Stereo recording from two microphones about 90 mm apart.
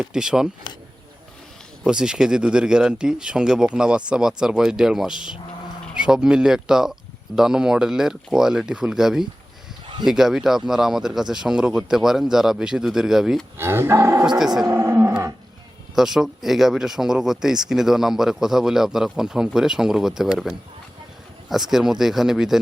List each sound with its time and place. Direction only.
0.0 s speech: 10° right (ahead or behind)
1.8 s speech: 10° right (ahead or behind)
9.8 s a sound: 60° right (ahead or behind)
10.1 s speech: 5° right (ahead or behind)
13.6 s speech: 25° right (ahead or behind)
14.3 s speech: 5° right (ahead or behind)
14.7 s roaring cats: 30° right (ahead or behind)
16.0 s speech: 5° right (ahead or behind)